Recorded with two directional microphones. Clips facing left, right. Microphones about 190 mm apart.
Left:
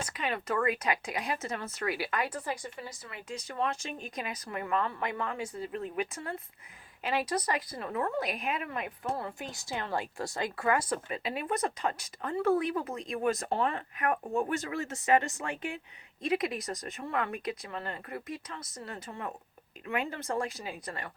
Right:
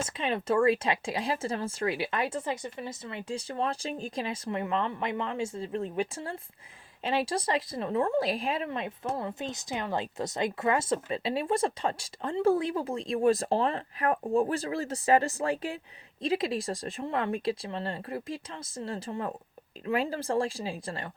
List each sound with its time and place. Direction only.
0.0 s speech: 25° right (ahead or behind)